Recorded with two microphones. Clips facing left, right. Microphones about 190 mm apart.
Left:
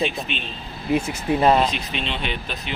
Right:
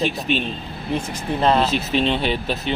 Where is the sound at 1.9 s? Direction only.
35° right (ahead or behind).